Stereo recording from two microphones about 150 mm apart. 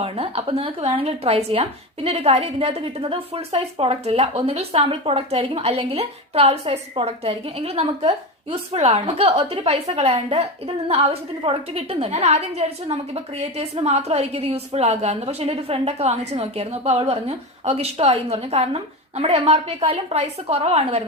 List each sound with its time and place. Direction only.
0.0 s a woman's voice: 40° right (ahead or behind)